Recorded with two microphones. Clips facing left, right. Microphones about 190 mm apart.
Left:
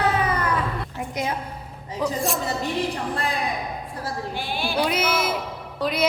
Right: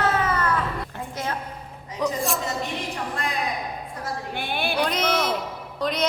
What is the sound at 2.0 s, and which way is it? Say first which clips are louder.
Music: even; centre (ahead or behind).